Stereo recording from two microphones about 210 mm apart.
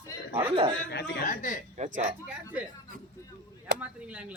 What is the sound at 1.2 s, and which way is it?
Speech, 40° left (ahead or behind).